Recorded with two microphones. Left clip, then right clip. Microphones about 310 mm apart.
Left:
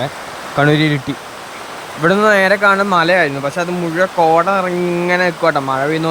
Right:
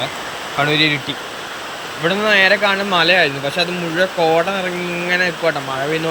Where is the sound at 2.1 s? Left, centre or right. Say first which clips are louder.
Left 2 dB; left.